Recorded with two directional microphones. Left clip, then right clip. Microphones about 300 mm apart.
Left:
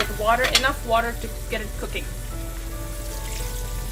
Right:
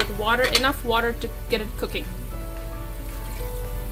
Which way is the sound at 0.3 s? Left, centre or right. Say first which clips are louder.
Left 1 dB; right.